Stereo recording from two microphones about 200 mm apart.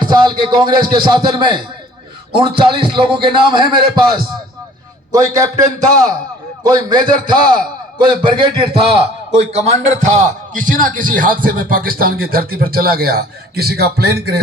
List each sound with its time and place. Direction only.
0.0 s a man's voice: 25° right (ahead or behind)
6.7 s a man's voice: 20° right (ahead or behind); by 14.4 s 50° right (ahead or behind)